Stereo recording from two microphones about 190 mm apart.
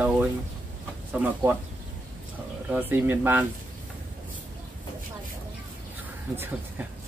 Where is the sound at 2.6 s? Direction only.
10° right (ahead or behind).